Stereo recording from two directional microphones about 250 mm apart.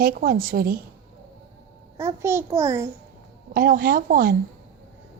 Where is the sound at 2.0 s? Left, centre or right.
Centre.